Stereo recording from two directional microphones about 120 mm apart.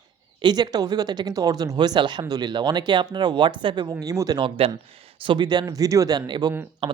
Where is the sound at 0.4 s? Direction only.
35° right (ahead or behind).